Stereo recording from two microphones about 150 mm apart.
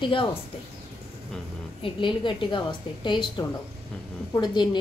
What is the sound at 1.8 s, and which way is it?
A woman's voice, 35° left (ahead or behind).